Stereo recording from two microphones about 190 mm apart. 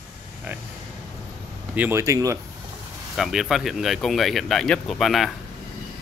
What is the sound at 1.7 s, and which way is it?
Speech, 10° right (ahead or behind).